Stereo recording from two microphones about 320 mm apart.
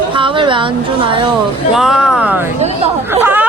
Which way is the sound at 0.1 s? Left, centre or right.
Centre.